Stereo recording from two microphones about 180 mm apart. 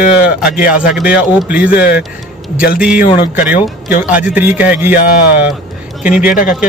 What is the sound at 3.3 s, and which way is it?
A man's voice, 10° right (ahead or behind).